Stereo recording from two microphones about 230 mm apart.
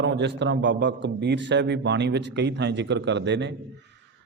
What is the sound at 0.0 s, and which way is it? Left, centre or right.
A man's voice, right.